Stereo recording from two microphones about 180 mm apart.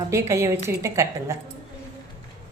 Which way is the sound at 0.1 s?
15° right (ahead or behind).